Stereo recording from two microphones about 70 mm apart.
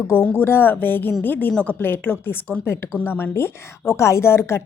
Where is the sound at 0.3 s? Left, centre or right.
Left.